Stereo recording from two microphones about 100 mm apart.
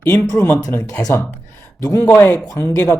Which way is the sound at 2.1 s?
25° left (ahead or behind).